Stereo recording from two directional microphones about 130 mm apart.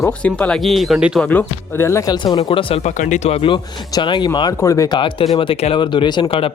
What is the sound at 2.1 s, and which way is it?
Speech, 35° left (ahead or behind).